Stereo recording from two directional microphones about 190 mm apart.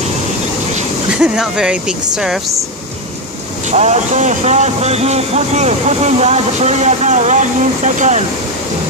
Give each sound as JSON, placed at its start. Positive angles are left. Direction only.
{"t": 1.1, "sound": "speech", "side_deg": -5}
{"t": 3.7, "sound": "speech", "side_deg": -35}